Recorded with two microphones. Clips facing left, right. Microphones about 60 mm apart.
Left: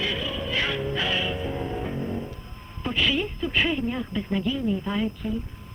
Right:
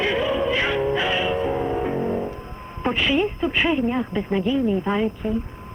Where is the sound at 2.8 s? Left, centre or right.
Right.